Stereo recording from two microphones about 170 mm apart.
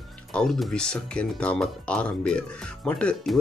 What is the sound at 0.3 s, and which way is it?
Speech, centre (ahead or behind).